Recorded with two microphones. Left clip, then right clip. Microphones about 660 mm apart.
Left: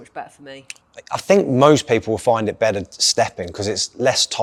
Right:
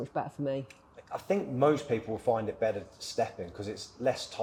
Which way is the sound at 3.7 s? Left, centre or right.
Left.